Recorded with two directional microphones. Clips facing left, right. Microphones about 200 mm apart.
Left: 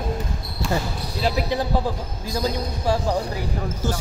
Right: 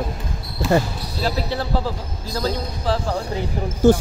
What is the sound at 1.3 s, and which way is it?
Speech, 15° left (ahead or behind).